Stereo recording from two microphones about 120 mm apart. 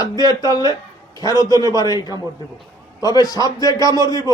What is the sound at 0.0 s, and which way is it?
A man's voice, 30° left (ahead or behind).